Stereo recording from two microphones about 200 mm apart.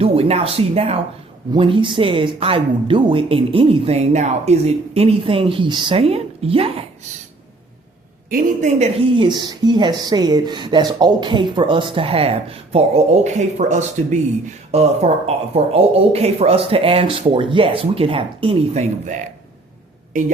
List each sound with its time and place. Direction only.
0.0 s speech: 30° right (ahead or behind)
8.3 s speech: 40° right (ahead or behind)